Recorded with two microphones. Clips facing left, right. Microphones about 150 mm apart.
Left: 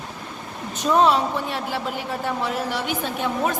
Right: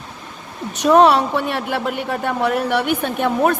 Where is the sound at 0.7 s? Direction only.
70° right (ahead or behind).